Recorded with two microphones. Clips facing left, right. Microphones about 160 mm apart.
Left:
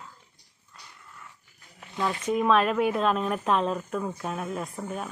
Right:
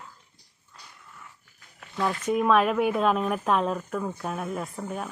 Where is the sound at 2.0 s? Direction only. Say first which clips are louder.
Right 1 dB; 5° right (ahead or behind).